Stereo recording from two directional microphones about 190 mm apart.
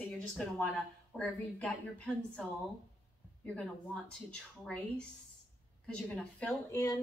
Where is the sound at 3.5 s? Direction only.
5° left (ahead or behind).